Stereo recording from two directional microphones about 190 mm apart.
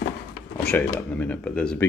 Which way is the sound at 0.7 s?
10° left (ahead or behind).